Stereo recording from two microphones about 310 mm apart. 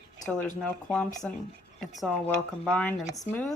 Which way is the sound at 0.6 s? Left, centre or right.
Centre.